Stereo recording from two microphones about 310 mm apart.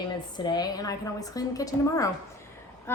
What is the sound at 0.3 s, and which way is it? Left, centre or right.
A woman's voice, centre.